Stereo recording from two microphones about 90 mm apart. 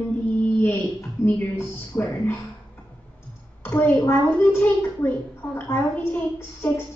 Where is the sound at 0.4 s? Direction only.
20° left (ahead or behind).